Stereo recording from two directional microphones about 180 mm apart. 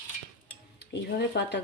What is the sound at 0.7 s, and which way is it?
Speech, 70° left (ahead or behind).